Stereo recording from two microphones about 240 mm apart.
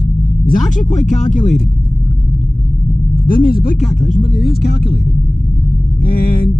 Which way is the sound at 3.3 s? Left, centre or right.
Left.